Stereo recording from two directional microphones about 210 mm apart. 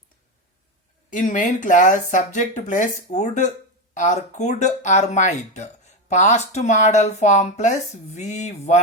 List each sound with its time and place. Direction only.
1.1 s speech: 35° left (ahead or behind)